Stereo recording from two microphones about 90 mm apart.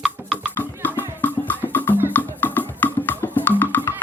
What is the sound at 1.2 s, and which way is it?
Music, 20° left (ahead or behind).